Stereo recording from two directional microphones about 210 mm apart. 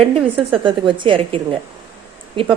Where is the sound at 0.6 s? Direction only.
25° right (ahead or behind).